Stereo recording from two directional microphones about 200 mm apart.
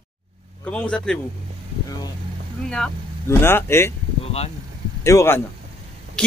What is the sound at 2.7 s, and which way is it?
Speech, 10° left (ahead or behind).